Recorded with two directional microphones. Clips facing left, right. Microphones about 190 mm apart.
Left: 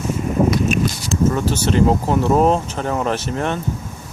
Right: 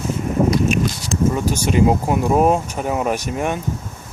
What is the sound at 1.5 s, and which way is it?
Speech, 10° right (ahead or behind).